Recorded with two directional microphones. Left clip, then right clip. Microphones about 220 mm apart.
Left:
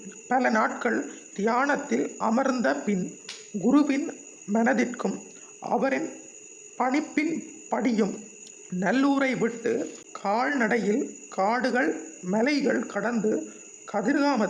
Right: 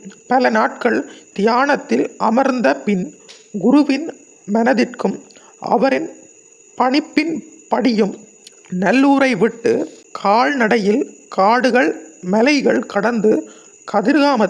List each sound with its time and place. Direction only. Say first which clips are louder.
0.3 s a man's voice: right 9 dB; 40° right (ahead or behind)